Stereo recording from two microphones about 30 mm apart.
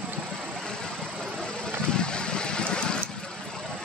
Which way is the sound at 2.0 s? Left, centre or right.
Left.